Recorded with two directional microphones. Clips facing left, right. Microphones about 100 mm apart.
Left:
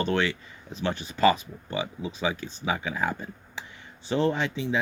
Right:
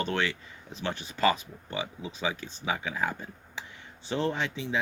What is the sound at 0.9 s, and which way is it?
Speech, 10° left (ahead or behind).